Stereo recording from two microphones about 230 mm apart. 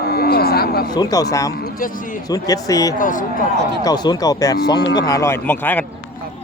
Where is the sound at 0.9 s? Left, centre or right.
Centre.